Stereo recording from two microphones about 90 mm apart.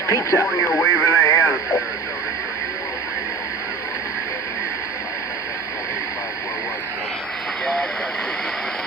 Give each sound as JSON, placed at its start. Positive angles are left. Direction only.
{"t": 0.1, "sound": "speech", "side_deg": 35}
{"t": 0.8, "sound": "radio", "side_deg": 35}
{"t": 7.6, "sound": "vehicle", "side_deg": 10}